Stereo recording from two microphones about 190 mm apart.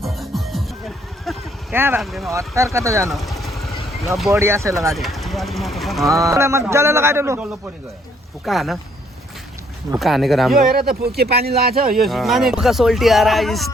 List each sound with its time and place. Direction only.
0.0 s music: centre (ahead or behind)
1.7 s a man's voice: 10° right (ahead or behind)
2.0 s speech: centre (ahead or behind)
2.3 s a man's voice: 15° right (ahead or behind)
3.1 s vehicle: centre (ahead or behind)
4.3 s a man's voice: 15° right (ahead or behind)
4.9 s speech: centre (ahead or behind)
6.1 s a man's voice: 15° right (ahead or behind); by 8.8 s centre (ahead or behind)
10.0 s speech: centre (ahead or behind)
10.7 s speech: 55° right (ahead or behind)
11.9 s speech: centre (ahead or behind)